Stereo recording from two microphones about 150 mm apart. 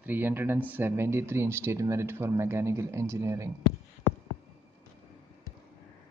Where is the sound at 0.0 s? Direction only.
10° right (ahead or behind).